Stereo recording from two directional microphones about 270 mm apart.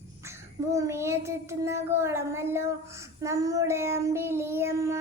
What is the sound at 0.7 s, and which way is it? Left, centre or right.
Child singing, centre.